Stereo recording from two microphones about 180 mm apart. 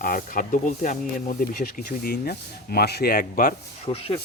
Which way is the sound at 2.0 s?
60° left (ahead or behind).